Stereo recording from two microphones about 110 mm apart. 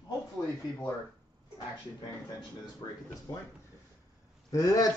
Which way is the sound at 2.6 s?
35° left (ahead or behind).